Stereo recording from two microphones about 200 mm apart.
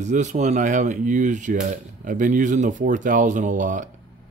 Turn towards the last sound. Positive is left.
turn(degrees=-40)  # may be behind; listen again after turning